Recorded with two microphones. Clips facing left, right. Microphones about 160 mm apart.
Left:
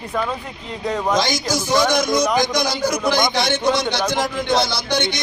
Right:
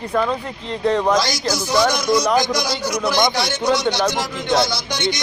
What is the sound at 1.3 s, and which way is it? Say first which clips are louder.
Speech: left 1 dB; 50° left (ahead or behind).